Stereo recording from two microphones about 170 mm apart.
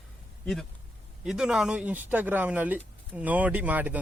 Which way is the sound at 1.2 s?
5° right (ahead or behind).